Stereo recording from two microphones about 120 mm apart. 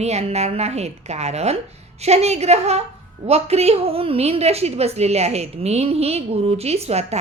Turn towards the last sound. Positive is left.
turn(degrees=-60)  # may be behind; listen again after turning